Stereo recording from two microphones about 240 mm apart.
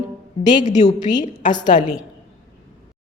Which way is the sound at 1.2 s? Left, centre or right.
Centre.